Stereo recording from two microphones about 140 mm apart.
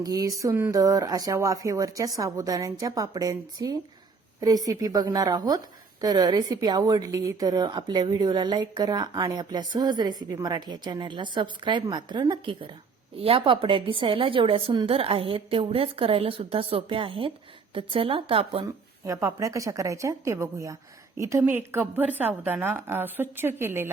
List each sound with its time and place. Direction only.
0.0 s a woman's voice: 25° right (ahead or behind)
19.0 s a woman's voice: 25° right (ahead or behind)